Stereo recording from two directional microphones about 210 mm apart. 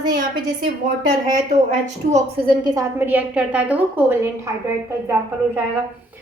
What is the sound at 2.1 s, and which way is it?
A woman's voice, 20° right (ahead or behind).